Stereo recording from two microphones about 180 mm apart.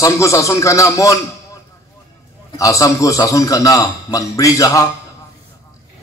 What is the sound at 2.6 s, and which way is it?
A man's voice, 20° left (ahead or behind).